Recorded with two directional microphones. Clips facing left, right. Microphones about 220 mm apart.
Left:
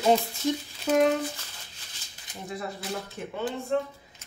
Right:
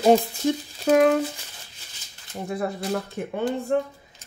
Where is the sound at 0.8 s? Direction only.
55° right (ahead or behind).